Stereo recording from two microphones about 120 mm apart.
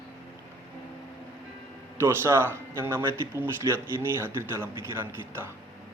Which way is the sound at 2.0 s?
20° right (ahead or behind).